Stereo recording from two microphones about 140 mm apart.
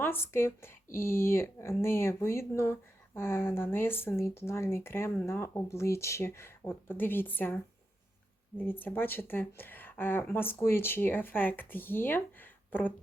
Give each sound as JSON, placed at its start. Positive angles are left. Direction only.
{"t": 0.0, "sound": "speech", "side_deg": 15}
{"t": 8.8, "sound": "speech", "side_deg": 15}